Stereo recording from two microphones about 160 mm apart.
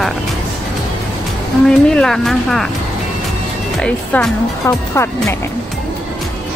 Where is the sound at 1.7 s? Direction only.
5° left (ahead or behind).